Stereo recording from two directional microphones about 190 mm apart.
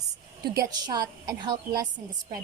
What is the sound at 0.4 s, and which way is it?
Speech, 55° right (ahead or behind).